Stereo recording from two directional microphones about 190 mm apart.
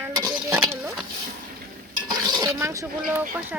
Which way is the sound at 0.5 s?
10° right (ahead or behind).